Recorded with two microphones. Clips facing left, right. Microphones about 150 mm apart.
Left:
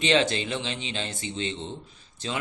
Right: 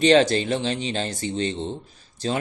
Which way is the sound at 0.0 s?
40° right (ahead or behind).